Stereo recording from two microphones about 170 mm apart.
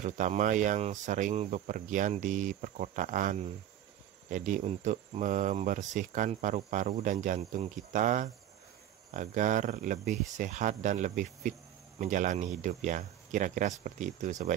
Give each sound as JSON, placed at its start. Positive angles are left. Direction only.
{"t": 0.0, "sound": "speech", "side_deg": -45}